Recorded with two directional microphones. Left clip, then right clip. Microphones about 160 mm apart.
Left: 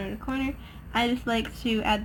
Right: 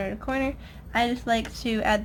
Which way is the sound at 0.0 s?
30° right (ahead or behind).